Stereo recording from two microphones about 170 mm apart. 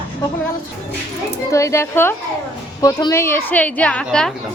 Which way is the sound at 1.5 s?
15° left (ahead or behind).